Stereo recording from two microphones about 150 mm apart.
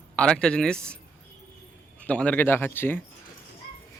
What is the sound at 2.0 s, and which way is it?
Speech, 10° left (ahead or behind).